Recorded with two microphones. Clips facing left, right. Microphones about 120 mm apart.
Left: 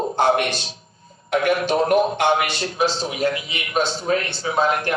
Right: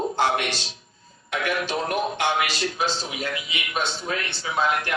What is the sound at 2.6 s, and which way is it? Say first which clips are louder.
A man's voice: left 4 dB; 35° left (ahead or behind).